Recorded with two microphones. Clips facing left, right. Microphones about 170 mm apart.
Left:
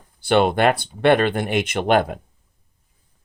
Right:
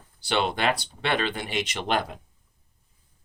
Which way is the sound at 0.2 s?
50° left (ahead or behind).